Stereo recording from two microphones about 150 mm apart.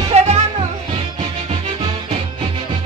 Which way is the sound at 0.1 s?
45° right (ahead or behind).